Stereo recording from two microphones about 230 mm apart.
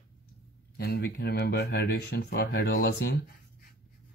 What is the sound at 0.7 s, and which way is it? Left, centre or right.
Speech, left.